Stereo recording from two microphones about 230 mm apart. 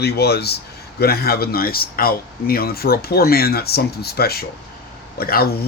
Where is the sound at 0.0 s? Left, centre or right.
Left.